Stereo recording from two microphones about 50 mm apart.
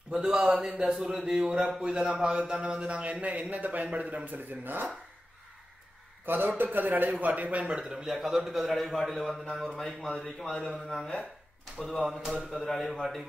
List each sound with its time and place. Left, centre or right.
0.1 s a man's voice: centre
1.1 s a man's voice: centre
1.4 s speech: centre; by 4.8 s right
6.2 s a man's voice: right
7.7 s a man's voice: centre
11.8 s a man's voice: centre